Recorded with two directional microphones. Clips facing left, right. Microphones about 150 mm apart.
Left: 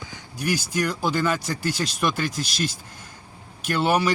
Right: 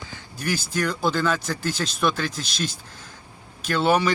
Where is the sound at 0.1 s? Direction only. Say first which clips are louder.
Left 2 dB; 10° left (ahead or behind).